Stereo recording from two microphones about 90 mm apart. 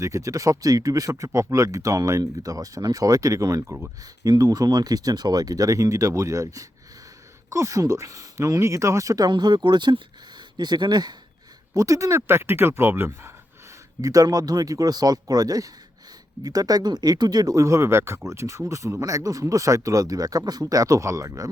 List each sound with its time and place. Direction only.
0.0 s speech: 35° right (ahead or behind)
9.3 s speech: 55° right (ahead or behind)
11.7 s speech: 40° right (ahead or behind)
14.0 s speech: 40° right (ahead or behind)